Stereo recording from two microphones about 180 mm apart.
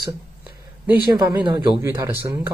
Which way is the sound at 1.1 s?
20° right (ahead or behind).